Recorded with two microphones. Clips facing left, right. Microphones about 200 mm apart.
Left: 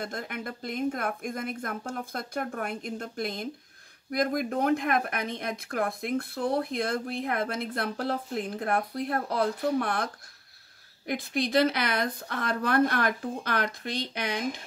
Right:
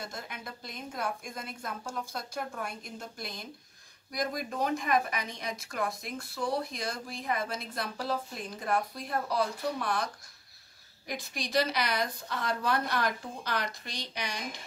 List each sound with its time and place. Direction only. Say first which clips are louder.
0.0 s a woman's voice: left 7 dB; 55° left (ahead or behind)
11.1 s a woman's voice: left 9 dB; 55° left (ahead or behind)